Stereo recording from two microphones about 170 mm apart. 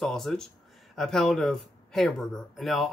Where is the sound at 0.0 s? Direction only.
Centre (ahead or behind).